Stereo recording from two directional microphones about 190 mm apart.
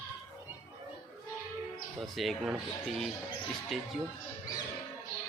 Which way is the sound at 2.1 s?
Centre (ahead or behind).